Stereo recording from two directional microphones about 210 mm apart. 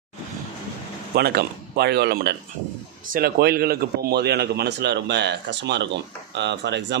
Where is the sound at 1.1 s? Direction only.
50° right (ahead or behind).